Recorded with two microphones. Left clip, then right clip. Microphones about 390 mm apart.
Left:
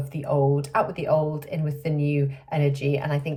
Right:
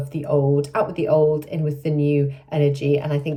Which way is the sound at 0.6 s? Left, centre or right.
Left.